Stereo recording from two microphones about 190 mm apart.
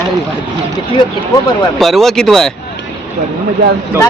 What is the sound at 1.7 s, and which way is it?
Speech, centre (ahead or behind).